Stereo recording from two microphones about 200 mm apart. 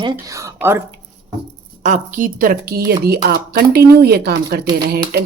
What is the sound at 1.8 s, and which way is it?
Speech, 40° right (ahead or behind).